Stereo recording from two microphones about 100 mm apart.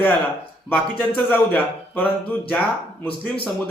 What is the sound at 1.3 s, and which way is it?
Speech, 15° left (ahead or behind).